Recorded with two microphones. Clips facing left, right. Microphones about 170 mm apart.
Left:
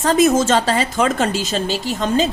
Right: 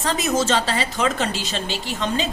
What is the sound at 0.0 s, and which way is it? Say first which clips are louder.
A woman's voice: left 7 dB; 50° left (ahead or behind).